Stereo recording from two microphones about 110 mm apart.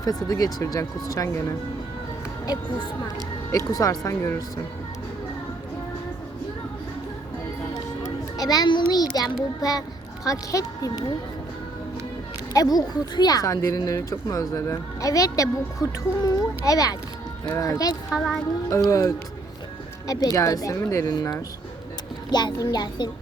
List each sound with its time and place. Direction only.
0.0 s speech: 35° left (ahead or behind)
2.5 s speech: 45° left (ahead or behind)
3.5 s speech: 30° left (ahead or behind)
8.0 s children playing: 35° left (ahead or behind)
9.1 s speech: 35° left (ahead or behind)
12.5 s speech: 35° left (ahead or behind)